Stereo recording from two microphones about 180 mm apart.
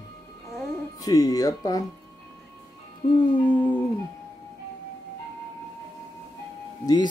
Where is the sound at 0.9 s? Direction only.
20° left (ahead or behind).